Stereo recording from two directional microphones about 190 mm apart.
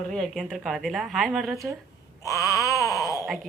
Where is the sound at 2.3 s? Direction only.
15° left (ahead or behind).